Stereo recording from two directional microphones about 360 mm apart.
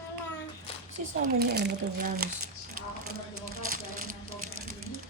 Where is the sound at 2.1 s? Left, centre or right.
Right.